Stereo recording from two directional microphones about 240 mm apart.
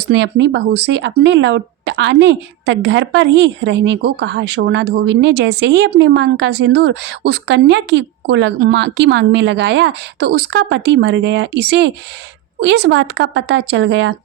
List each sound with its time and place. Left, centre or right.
0.1 s speech: right